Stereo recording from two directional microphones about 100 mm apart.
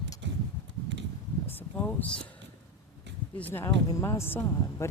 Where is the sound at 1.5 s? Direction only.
15° left (ahead or behind).